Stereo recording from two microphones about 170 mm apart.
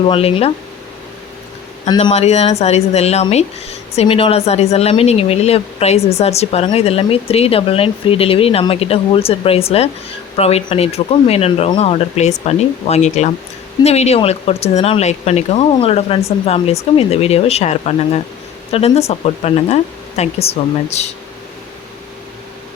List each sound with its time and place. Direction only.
0.0 s speech: 35° left (ahead or behind)
2.0 s speech: 40° left (ahead or behind)